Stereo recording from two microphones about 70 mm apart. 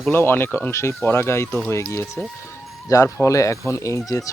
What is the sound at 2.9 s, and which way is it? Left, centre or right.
Speech, left.